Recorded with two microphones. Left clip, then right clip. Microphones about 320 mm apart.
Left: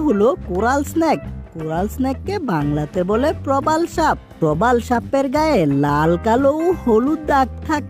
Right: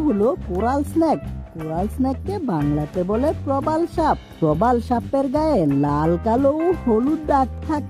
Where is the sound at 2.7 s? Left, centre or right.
Left.